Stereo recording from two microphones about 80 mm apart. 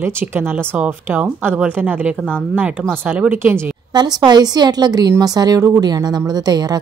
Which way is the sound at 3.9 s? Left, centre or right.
Right.